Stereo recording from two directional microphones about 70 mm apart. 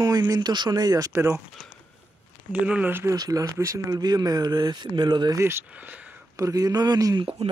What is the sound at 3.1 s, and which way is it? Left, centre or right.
Speech, right.